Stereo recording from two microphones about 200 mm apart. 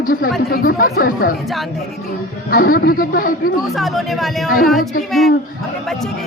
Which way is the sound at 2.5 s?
45° left (ahead or behind).